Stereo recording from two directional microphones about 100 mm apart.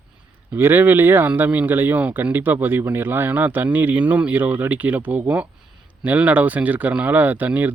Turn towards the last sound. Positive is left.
turn(degrees=-15)  # may be behind; listen again after turning